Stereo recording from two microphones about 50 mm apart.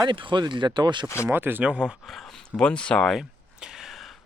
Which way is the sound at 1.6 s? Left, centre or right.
Right.